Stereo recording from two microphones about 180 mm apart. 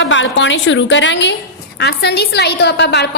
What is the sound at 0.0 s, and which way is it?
A woman's voice, 90° left.